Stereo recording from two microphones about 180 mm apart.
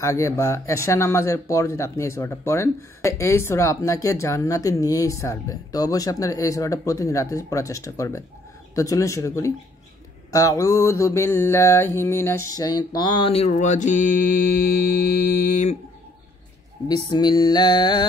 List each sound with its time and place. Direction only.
0.0 s speech: 15° left (ahead or behind)
10.3 s mantra: 20° left (ahead or behind); by 15.7 s 50° left (ahead or behind)
16.8 s mantra: 20° left (ahead or behind)